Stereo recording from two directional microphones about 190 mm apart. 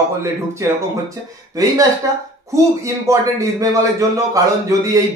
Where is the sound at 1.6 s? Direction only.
20° right (ahead or behind).